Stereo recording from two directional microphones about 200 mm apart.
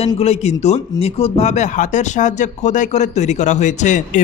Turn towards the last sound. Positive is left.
turn(degrees=40)  # may be behind; listen again after turning